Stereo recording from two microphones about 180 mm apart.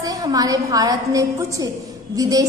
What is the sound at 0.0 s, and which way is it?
A woman's voice, 20° right (ahead or behind).